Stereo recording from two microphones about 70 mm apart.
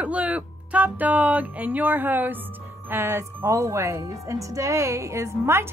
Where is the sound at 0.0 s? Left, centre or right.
Centre.